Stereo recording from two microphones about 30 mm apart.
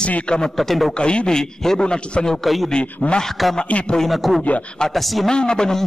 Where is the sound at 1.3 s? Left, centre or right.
Left.